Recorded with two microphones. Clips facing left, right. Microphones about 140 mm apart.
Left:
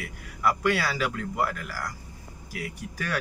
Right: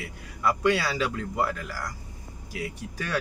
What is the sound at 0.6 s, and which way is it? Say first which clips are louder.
Speech: right 2 dB; 20° right (ahead or behind).